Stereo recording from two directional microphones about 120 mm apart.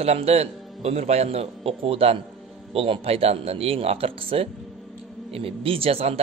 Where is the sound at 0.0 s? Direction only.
60° right (ahead or behind).